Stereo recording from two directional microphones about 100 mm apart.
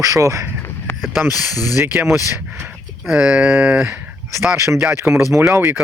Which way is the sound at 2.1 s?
25° right (ahead or behind).